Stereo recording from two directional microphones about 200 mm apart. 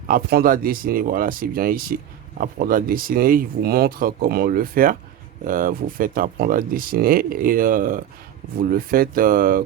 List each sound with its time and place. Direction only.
0.1 s speech: 50° right (ahead or behind)